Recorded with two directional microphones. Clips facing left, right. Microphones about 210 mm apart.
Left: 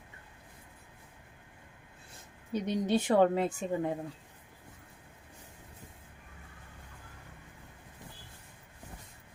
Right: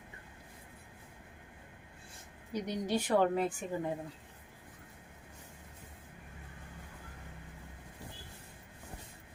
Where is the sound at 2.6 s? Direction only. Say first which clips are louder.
Left 5 dB; 20° left (ahead or behind).